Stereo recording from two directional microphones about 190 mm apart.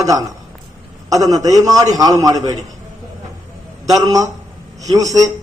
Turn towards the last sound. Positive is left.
turn(degrees=-20)  # may be behind; listen again after turning